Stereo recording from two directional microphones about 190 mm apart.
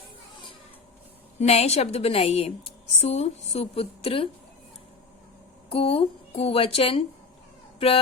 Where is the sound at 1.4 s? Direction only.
35° left (ahead or behind).